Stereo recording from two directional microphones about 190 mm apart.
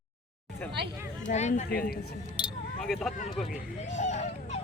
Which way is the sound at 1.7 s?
50° left (ahead or behind).